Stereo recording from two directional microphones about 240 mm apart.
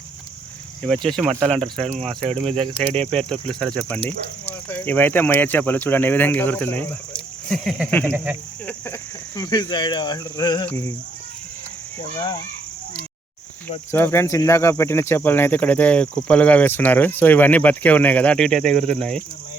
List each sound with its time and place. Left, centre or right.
1.0 s speech: centre
2.2 s speech: right
2.9 s speech: centre
4.4 s cricket: centre
7.5 s speech: centre
8.1 s speech: centre
8.6 s speech: centre
13.9 s cricket: centre
18.5 s speech: right
18.9 s speech: centre